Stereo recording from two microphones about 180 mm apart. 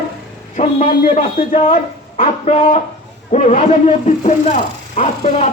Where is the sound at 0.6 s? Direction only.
40° left (ahead or behind).